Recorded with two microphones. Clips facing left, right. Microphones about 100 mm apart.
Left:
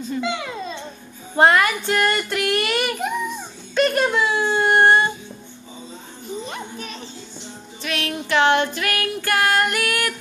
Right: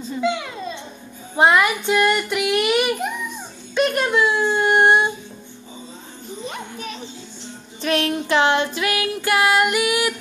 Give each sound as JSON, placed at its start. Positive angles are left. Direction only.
{"t": 0.2, "sound": "babbling", "side_deg": -5}
{"t": 1.3, "sound": "child singing", "side_deg": -10}
{"t": 3.7, "sound": "a sound", "side_deg": -5}
{"t": 6.4, "sound": "music", "side_deg": -5}
{"t": 7.8, "sound": "child singing", "side_deg": -35}